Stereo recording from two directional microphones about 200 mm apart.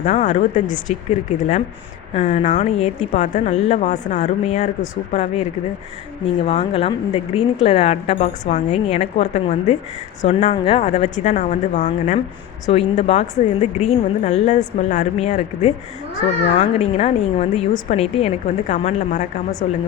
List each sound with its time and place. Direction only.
0.0 s a woman's voice: 35° left (ahead or behind)
2.1 s a woman's voice: 35° left (ahead or behind)